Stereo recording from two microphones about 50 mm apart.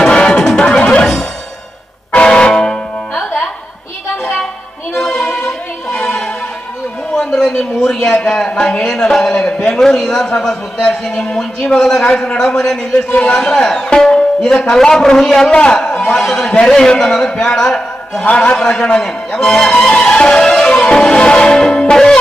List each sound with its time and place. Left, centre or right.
0.0 s music: centre
1.0 s music: centre
2.1 s music: centre
4.9 s music: centre
7.3 s a man's voice: centre
18.3 s a man's voice: left
18.5 s a man's voice: centre
19.7 s a man's voice: left
20.0 s music: centre
20.8 s a man's voice: centre